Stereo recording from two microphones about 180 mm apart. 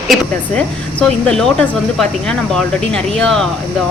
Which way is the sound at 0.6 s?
5° left (ahead or behind).